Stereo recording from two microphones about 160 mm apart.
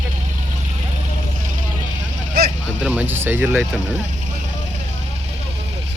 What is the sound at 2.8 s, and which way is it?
Speech, 10° right (ahead or behind).